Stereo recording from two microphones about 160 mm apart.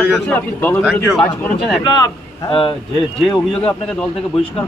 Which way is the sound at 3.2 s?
5° left (ahead or behind).